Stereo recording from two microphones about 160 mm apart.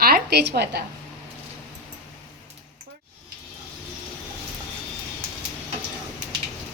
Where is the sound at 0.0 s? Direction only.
80° right.